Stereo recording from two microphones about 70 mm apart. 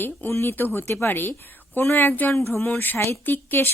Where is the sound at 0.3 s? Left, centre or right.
Left.